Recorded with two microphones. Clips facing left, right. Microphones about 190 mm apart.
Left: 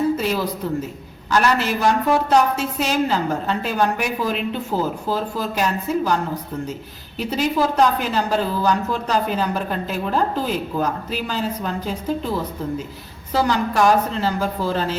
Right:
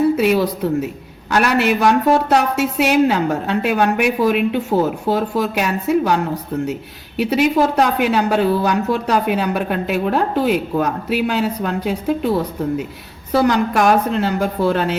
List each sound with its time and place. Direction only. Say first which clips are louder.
0.2 s a woman's voice: right 7 dB; 65° right (ahead or behind)
7.2 s a woman's voice: right 5 dB; 65° right (ahead or behind)